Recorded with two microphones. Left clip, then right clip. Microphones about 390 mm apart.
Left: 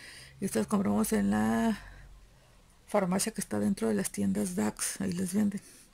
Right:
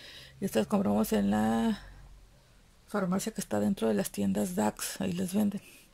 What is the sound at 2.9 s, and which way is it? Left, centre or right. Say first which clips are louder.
Speech: left 3 dB; centre.